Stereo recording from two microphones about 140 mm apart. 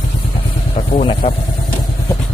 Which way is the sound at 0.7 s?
40° left (ahead or behind).